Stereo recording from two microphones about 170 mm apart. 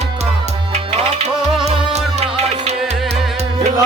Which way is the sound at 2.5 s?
40° right (ahead or behind).